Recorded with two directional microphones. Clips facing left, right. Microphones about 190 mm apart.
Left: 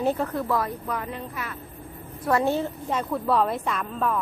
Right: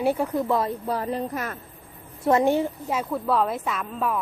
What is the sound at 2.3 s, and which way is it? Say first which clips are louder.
A woman's voice: right 3 dB; 20° right (ahead or behind).